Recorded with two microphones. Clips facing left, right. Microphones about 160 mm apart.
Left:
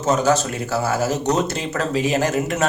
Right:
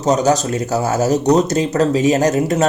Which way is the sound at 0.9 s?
40° right (ahead or behind).